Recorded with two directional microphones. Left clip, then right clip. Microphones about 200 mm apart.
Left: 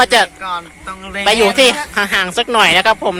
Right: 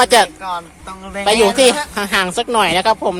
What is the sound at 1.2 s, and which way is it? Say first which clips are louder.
A woman's voice: left 1 dB; centre (ahead or behind).